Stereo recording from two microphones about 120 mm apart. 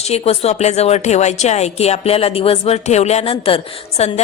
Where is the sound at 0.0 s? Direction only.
60° left (ahead or behind).